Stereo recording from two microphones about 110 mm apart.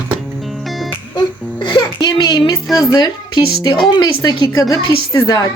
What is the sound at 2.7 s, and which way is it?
Speech, 40° left (ahead or behind).